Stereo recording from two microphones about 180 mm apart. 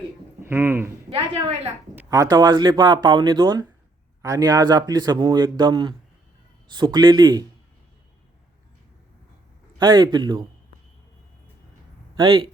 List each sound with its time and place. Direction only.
0.4 s speech: 10° right (ahead or behind)
1.1 s a woman's voice: 35° right (ahead or behind)
2.0 s speech: 20° right (ahead or behind)
9.7 s speech: 25° right (ahead or behind)
12.1 s speech: 25° right (ahead or behind)